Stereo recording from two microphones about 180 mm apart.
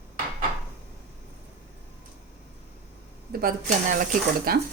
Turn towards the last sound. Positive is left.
turn(degrees=-55)  # may be behind; listen again after turning